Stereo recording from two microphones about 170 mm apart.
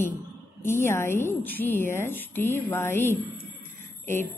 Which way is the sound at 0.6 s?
15° left (ahead or behind).